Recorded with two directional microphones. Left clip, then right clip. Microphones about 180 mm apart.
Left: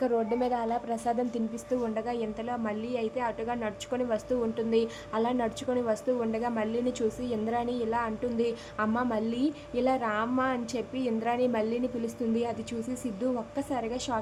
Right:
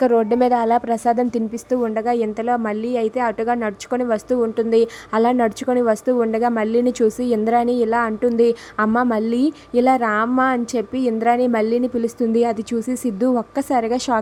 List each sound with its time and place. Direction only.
0.0 s a woman's voice: 45° right (ahead or behind)